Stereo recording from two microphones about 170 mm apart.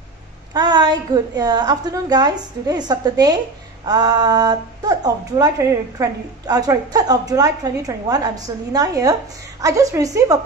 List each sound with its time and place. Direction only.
0.5 s a woman's voice: 25° right (ahead or behind)